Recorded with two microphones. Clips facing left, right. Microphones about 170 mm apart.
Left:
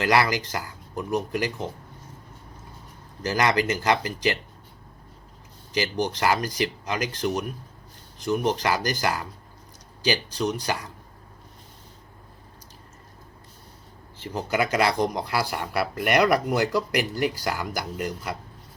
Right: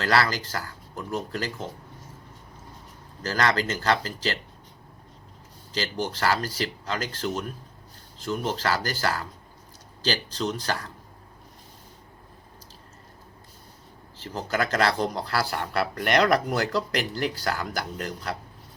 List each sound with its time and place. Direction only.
0.0 s speech: 15° left (ahead or behind)
3.2 s speech: 15° left (ahead or behind)
5.7 s speech: 15° left (ahead or behind)
14.2 s speech: 15° left (ahead or behind)